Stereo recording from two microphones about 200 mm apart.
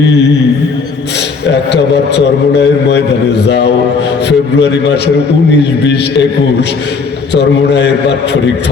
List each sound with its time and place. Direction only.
1.5 s a man's voice: 60° left (ahead or behind)